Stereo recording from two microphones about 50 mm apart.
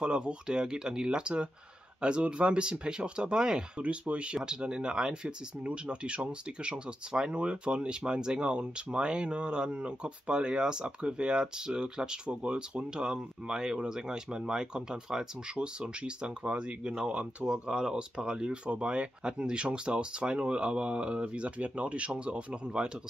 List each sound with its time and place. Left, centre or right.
0.0 s speech: right